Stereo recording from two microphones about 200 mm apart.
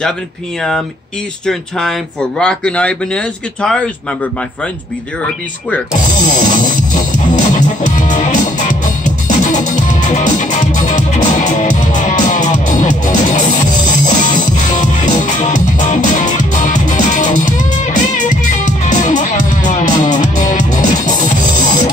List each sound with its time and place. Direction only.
1.4 s speech: centre (ahead or behind)
6.3 s music: 40° left (ahead or behind)